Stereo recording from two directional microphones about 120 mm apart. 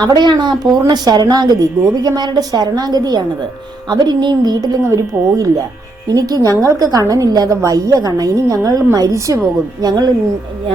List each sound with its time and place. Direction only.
0.0 s speech: 35° right (ahead or behind)
6.1 s a woman's voice: 30° right (ahead or behind)